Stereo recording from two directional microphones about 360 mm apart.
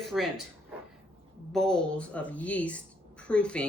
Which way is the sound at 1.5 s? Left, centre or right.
Centre.